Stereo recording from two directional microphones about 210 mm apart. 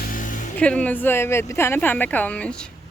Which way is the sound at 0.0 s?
40° left (ahead or behind).